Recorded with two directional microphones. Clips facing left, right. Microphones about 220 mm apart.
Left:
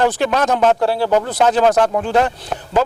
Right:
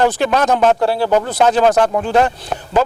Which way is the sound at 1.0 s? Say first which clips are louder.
Right 1 dB; 35° right (ahead or behind).